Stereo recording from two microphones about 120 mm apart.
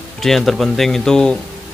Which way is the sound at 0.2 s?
Centre (ahead or behind).